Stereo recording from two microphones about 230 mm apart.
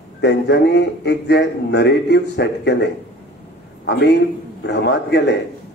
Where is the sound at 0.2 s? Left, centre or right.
Left.